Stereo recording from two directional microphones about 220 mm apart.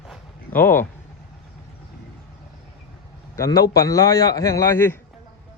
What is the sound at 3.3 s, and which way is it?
Speech, 15° left (ahead or behind).